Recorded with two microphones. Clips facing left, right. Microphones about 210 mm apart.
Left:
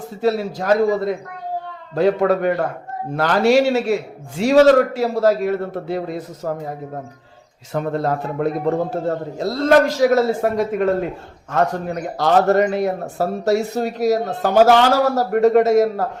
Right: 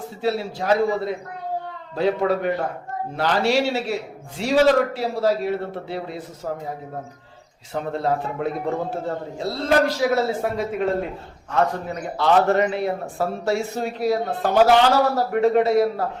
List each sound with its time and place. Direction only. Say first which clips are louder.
0.2 s speech: left 5 dB; 45° left (ahead or behind)
7.7 s speech: left 3 dB; 45° left (ahead or behind)